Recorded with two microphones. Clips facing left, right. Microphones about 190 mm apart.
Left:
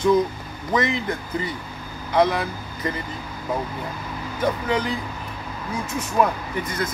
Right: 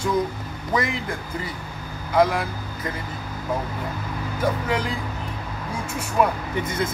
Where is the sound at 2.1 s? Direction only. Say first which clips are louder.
Even; 5° right (ahead or behind).